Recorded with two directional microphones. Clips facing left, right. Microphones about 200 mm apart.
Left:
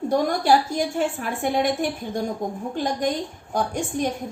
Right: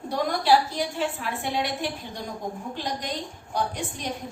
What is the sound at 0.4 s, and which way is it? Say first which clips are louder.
A woman's voice: left 2 dB; 50° left (ahead or behind).